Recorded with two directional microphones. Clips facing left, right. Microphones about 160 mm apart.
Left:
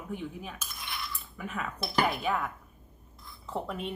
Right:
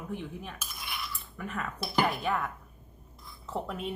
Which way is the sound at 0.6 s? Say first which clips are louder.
Even; 5° right (ahead or behind).